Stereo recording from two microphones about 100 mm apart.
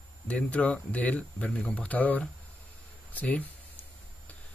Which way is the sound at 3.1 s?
15° left (ahead or behind).